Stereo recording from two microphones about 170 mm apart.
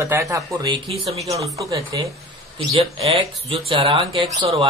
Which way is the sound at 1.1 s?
35° right (ahead or behind).